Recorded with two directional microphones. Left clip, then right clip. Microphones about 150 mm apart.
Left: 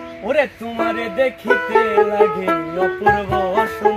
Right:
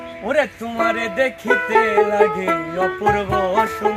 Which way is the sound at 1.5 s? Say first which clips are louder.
Right 1 dB; 25° left (ahead or behind).